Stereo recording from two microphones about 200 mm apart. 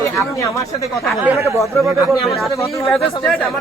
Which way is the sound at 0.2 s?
15° left (ahead or behind).